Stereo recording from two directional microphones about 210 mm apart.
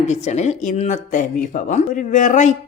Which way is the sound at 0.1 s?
35° left (ahead or behind).